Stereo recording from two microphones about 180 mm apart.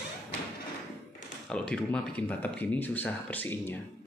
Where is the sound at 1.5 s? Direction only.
5° left (ahead or behind).